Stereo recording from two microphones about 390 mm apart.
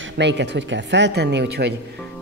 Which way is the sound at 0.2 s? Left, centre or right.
Right.